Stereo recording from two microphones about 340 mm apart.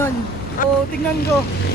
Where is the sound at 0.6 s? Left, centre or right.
Left.